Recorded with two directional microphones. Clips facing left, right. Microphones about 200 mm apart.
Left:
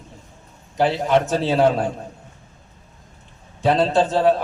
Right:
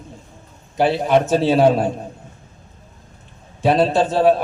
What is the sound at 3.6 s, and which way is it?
Speech, 15° right (ahead or behind).